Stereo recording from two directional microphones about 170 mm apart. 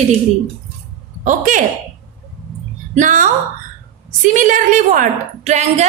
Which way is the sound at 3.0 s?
50° right (ahead or behind).